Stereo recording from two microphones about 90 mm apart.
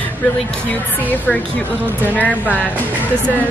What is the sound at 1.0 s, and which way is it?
Speech, 20° left (ahead or behind).